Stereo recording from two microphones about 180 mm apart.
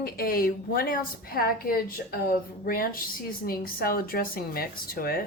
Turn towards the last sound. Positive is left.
turn(degrees=55)  # may be behind; listen again after turning